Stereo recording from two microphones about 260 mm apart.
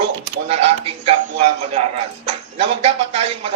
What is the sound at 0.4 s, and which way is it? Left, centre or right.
Speech, right.